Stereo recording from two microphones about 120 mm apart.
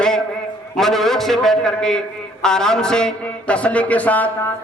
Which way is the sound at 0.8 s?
Centre (ahead or behind).